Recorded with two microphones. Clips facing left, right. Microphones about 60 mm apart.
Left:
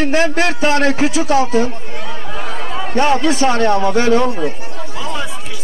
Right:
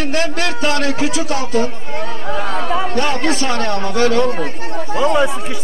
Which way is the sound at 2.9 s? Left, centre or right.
Left.